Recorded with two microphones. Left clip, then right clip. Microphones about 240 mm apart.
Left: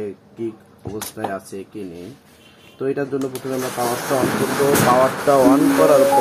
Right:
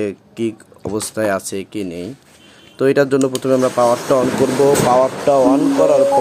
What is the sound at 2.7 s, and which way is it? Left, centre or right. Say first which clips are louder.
Speech: right 9 dB; right.